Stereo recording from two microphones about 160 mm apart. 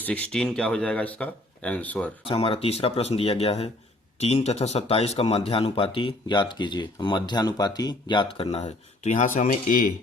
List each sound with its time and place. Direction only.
0.0 s speech: 10° left (ahead or behind)
2.2 s speech: 35° left (ahead or behind)
8.4 s speech: 45° left (ahead or behind)